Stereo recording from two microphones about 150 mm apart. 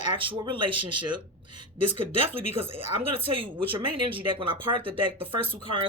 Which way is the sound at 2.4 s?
40° right (ahead or behind).